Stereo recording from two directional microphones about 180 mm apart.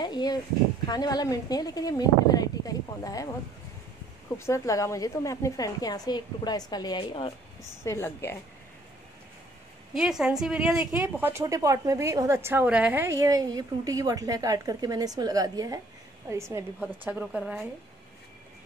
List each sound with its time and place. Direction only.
0.0 s a woman's voice: 25° left (ahead or behind)
4.4 s a woman's voice: 15° left (ahead or behind)
7.8 s a woman's voice: 15° left (ahead or behind)
9.9 s a woman's voice: 5° right (ahead or behind)